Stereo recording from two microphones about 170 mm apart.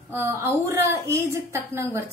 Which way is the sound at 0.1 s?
15° right (ahead or behind).